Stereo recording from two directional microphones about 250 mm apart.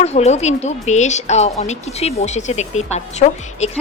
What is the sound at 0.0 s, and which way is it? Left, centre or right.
Speech, left.